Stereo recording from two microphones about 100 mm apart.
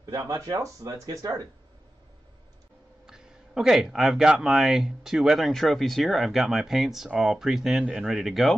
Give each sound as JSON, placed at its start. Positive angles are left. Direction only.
{"t": 0.0, "sound": "speech", "side_deg": -35}
{"t": 3.1, "sound": "speech", "side_deg": -5}